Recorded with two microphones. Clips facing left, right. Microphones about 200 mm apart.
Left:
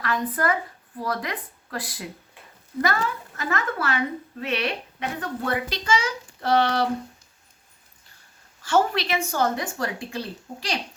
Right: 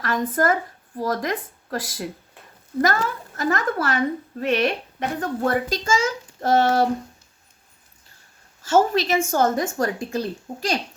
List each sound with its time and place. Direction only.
0.0 s a woman's voice: 45° right (ahead or behind)
8.6 s a woman's voice: 40° right (ahead or behind)